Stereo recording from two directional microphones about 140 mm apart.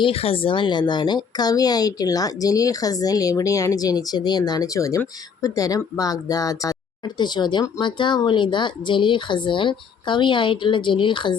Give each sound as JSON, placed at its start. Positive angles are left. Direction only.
{"t": 0.0, "sound": "a woman's voice", "side_deg": 45}